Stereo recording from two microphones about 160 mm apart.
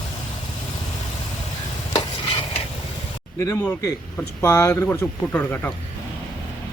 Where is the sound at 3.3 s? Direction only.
20° left (ahead or behind).